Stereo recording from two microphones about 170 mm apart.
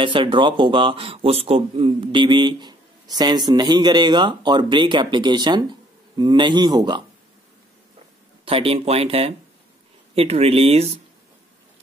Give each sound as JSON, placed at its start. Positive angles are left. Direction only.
{"t": 0.0, "sound": "a man's voice", "side_deg": -30}
{"t": 8.5, "sound": "speech", "side_deg": -35}